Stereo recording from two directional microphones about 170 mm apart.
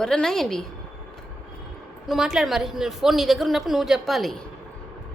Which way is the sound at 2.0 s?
Centre (ahead or behind).